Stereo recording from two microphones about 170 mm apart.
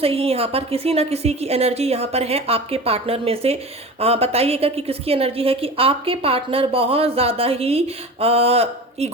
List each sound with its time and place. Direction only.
0.0 s a woman's voice: 35° right (ahead or behind)